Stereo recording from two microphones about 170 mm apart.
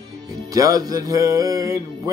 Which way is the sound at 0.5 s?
20° right (ahead or behind).